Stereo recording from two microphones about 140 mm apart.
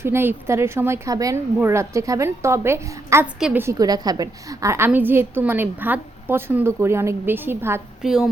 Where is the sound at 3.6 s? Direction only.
25° right (ahead or behind).